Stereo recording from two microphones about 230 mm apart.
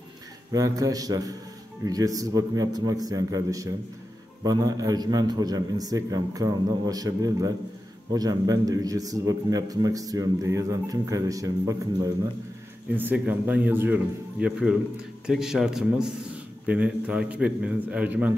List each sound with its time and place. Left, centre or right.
0.5 s a man's voice: centre